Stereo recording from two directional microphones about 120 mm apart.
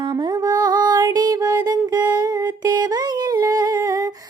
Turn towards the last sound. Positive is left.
turn(degrees=-30)  # may be behind; listen again after turning